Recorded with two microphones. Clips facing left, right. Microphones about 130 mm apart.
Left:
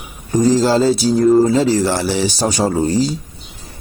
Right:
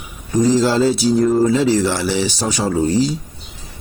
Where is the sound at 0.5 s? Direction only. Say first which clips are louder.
Left 1 dB; 40° left (ahead or behind).